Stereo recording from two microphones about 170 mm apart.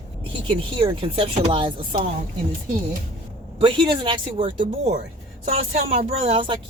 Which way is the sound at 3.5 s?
30° right (ahead or behind).